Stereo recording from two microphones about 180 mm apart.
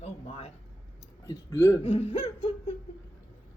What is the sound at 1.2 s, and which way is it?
Speech, 20° left (ahead or behind).